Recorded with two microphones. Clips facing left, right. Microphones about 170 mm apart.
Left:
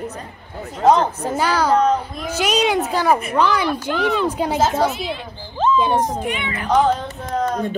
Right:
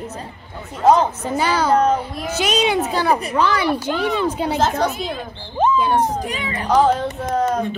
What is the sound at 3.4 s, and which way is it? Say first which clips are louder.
Music: even; 5° right (ahead or behind).